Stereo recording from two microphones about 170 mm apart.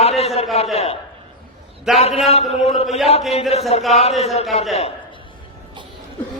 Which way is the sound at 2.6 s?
40° left (ahead or behind).